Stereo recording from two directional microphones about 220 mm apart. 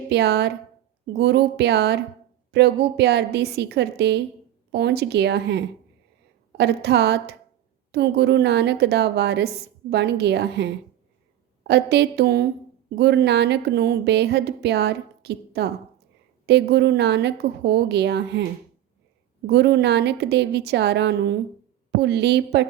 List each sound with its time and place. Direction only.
0.1 s a woman's voice: 50° right (ahead or behind)
19.5 s a woman's voice: 50° right (ahead or behind)